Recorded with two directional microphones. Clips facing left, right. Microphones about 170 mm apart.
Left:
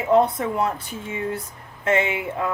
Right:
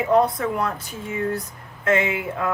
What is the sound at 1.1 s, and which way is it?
A woman's voice, 25° left (ahead or behind).